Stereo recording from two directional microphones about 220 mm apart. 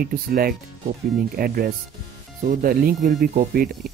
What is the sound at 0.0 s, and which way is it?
Speech, 40° right (ahead or behind).